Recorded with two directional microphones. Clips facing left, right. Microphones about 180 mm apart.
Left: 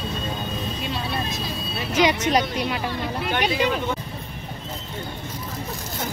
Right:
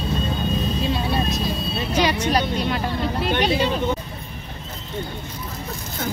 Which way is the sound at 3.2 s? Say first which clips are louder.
Right 1 dB; 30° right (ahead or behind).